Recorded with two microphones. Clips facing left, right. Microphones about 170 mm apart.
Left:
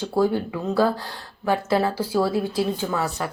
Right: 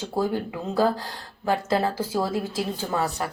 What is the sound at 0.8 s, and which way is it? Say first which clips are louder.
Speech: left 1 dB; 45° right (ahead or behind).